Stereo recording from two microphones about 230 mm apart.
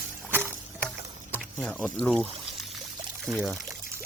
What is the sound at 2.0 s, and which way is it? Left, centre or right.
Speech, centre.